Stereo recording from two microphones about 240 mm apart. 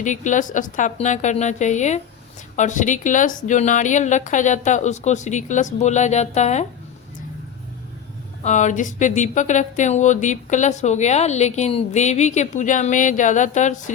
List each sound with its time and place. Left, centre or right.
0.0 s a woman's voice: left
8.4 s speech: left